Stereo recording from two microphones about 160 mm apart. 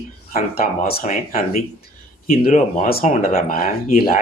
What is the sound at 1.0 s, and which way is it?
Speech, 55° left (ahead or behind).